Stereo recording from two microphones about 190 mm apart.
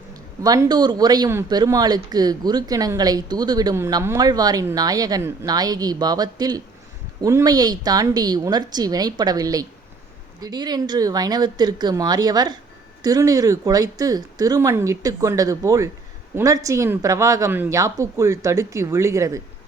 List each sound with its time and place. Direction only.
0.4 s speech: 20° right (ahead or behind)